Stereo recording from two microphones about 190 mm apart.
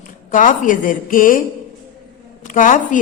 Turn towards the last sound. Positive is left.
turn(degrees=45)  # may be behind; listen again after turning